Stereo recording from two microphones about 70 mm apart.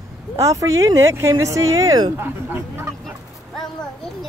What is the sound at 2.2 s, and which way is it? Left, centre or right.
Speech, right.